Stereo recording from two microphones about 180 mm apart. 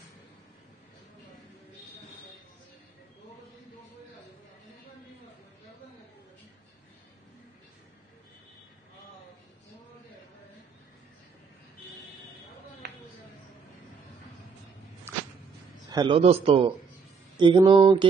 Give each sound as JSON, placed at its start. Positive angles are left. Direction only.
{"t": 15.9, "sound": "speech", "side_deg": -25}